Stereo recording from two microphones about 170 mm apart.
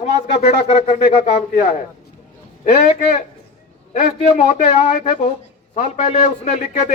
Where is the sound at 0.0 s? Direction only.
40° left (ahead or behind).